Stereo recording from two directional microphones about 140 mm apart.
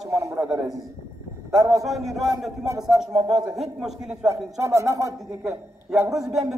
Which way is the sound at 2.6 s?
20° right (ahead or behind).